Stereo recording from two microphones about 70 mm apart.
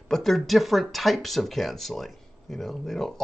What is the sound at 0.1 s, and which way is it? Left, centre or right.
Speech, centre.